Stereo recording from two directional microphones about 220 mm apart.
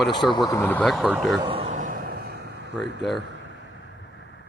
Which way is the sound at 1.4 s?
25° right (ahead or behind).